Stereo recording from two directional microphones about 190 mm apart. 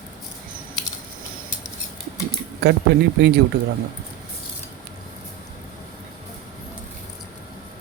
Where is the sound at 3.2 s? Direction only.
65° right (ahead or behind).